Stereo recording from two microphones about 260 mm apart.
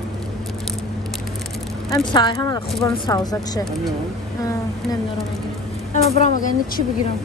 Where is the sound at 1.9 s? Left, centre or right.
Centre.